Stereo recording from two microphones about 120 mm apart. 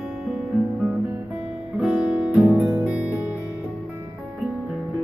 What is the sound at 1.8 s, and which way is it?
Guitar, 5° right (ahead or behind).